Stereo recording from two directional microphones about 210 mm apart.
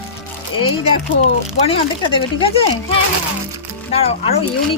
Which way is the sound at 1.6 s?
25° left (ahead or behind).